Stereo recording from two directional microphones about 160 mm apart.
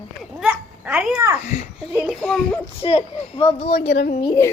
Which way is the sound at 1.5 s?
45° left (ahead or behind).